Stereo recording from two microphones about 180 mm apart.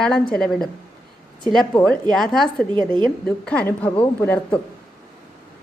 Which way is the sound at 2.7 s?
25° right (ahead or behind).